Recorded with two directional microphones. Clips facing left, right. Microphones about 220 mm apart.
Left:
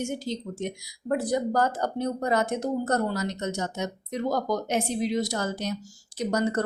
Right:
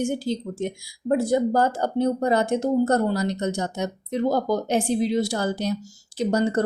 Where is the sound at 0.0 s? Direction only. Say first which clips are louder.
Right 6 dB; 35° right (ahead or behind).